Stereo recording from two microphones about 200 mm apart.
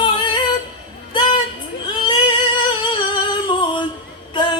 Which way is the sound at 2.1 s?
25° left (ahead or behind).